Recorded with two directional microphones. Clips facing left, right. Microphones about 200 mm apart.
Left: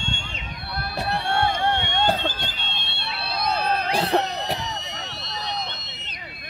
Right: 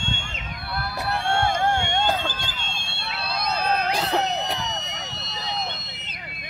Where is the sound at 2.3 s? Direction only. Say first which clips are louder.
Even; 45° right (ahead or behind).